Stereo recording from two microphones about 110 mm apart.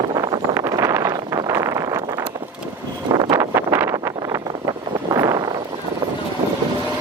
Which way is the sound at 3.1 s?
35° right (ahead or behind).